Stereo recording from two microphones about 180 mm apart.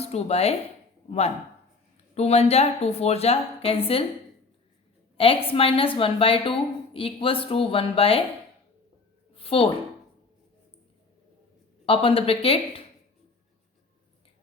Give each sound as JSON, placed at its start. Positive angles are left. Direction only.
{"t": 0.0, "sound": "speech", "side_deg": 35}
{"t": 2.1, "sound": "a woman's voice", "side_deg": 35}
{"t": 5.1, "sound": "a woman's voice", "side_deg": 30}
{"t": 9.3, "sound": "a sound", "side_deg": 30}
{"t": 11.9, "sound": "a woman's voice", "side_deg": 30}